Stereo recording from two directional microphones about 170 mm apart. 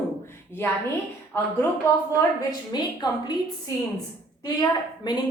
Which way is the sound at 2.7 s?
25° left (ahead or behind).